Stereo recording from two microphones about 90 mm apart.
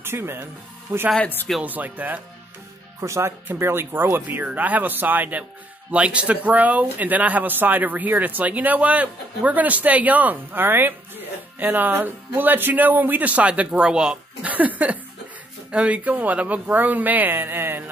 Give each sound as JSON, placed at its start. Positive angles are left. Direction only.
{"t": 0.0, "sound": "speech", "side_deg": -25}
{"t": 3.0, "sound": "speech", "side_deg": -30}